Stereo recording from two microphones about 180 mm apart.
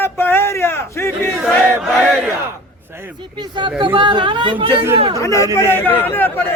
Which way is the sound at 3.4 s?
25° right (ahead or behind).